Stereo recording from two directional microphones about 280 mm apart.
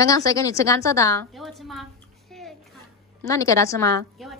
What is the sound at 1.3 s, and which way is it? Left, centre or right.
Speech, centre.